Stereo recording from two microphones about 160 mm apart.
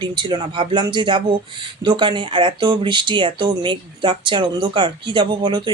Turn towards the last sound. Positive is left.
turn(degrees=-30)  # may be behind; listen again after turning